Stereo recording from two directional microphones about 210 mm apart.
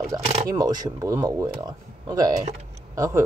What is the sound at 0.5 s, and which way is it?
Speech, 20° right (ahead or behind).